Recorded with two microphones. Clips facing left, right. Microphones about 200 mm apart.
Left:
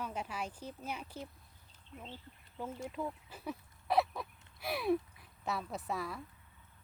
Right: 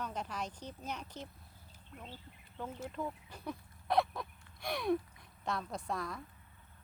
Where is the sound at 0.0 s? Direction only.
10° left (ahead or behind).